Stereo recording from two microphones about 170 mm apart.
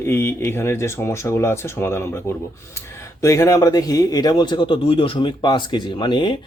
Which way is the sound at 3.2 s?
20° left (ahead or behind).